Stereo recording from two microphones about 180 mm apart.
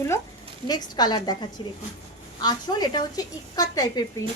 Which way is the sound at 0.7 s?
20° left (ahead or behind).